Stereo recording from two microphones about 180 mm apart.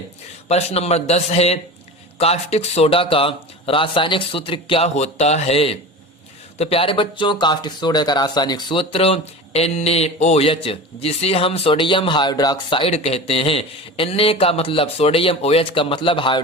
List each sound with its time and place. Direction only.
0.4 s speech: 35° left (ahead or behind)